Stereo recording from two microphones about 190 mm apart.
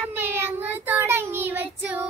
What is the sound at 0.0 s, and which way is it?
Child singing, 10° right (ahead or behind).